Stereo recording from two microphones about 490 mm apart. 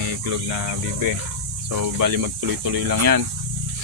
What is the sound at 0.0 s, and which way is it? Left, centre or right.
Speech, right.